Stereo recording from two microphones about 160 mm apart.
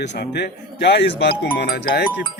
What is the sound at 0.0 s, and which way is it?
Speech, 90° left.